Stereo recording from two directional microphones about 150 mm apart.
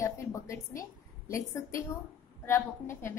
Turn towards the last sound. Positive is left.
turn(degrees=15)  # may be behind; listen again after turning